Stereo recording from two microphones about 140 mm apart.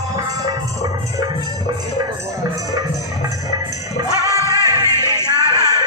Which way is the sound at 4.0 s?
25° right (ahead or behind).